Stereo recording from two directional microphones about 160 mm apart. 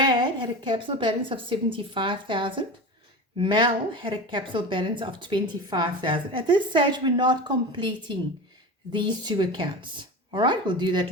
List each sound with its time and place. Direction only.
0.0 s a woman's voice: 30° right (ahead or behind)